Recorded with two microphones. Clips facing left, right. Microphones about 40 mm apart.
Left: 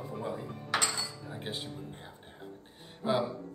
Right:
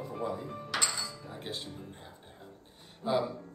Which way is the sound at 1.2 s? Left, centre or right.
Centre.